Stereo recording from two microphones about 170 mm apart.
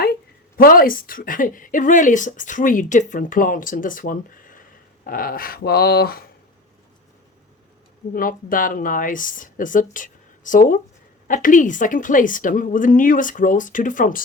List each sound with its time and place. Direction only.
0.0 s a woman's voice: 60° left (ahead or behind)
8.1 s a woman's voice: 55° left (ahead or behind)